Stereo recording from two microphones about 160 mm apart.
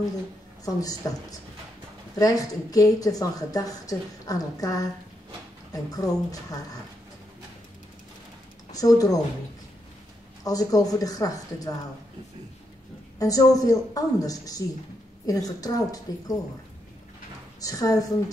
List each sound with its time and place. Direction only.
0.7 s a woman's voice: 20° left (ahead or behind)
2.1 s a woman's voice: 20° left (ahead or behind)
8.7 s a woman's voice: 20° left (ahead or behind)
10.4 s a woman's voice: 20° left (ahead or behind)
13.2 s a woman's voice: 20° left (ahead or behind)
17.6 s a woman's voice: 20° left (ahead or behind)